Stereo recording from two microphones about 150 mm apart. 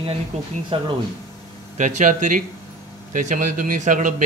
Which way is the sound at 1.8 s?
55° right (ahead or behind).